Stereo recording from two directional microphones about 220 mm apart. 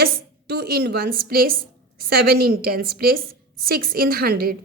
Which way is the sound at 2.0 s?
45° right (ahead or behind).